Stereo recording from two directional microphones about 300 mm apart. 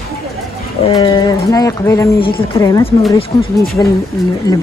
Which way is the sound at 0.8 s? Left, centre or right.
Centre.